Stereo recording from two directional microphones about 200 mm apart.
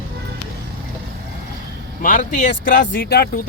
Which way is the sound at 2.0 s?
40° left (ahead or behind).